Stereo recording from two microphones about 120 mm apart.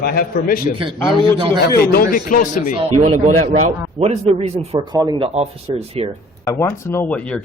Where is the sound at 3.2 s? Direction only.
60° right (ahead or behind).